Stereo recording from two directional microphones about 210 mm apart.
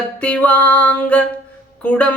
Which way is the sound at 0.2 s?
5° left (ahead or behind).